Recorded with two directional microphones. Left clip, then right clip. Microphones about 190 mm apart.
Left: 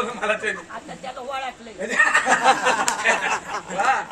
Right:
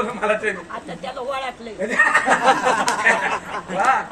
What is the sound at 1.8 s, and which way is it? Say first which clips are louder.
A man's voice: right 2 dB; 10° left (ahead or behind).